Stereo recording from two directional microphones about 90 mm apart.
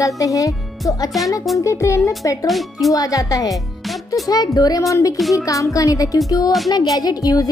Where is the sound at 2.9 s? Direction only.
40° left (ahead or behind).